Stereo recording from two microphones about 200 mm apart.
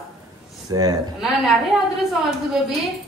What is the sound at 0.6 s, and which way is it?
Speech, 15° right (ahead or behind).